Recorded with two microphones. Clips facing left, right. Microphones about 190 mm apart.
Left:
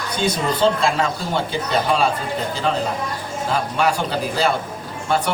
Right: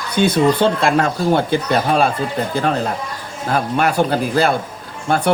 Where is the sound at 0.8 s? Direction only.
55° right (ahead or behind).